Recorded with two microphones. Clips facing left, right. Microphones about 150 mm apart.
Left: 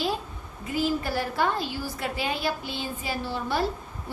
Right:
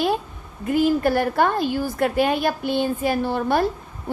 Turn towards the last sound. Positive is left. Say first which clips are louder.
# right 7 dB
turn(degrees=-55)  # may be behind; listen again after turning